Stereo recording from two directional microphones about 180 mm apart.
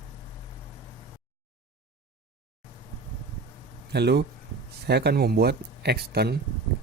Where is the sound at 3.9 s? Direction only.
65° right (ahead or behind).